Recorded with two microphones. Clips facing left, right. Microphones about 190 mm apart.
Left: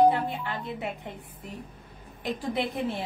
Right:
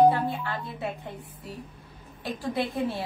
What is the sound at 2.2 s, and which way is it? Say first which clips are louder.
Speech: even; 20° left (ahead or behind).